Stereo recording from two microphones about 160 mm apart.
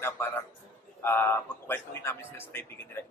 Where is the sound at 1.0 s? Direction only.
15° left (ahead or behind).